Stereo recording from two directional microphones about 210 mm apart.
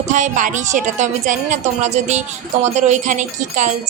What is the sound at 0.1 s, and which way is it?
A woman's voice, 35° right (ahead or behind).